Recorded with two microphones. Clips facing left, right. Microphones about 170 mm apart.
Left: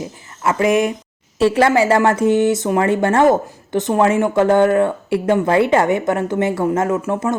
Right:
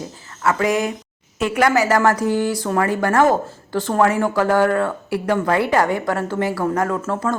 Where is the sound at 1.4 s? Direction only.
30° left (ahead or behind).